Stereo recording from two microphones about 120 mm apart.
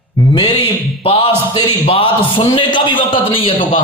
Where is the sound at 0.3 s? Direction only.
45° left (ahead or behind).